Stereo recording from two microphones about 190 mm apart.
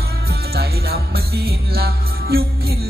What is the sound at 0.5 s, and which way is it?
Music, 55° right (ahead or behind).